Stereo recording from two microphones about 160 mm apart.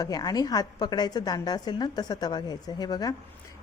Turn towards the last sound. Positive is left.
turn(degrees=25)  # may be behind; listen again after turning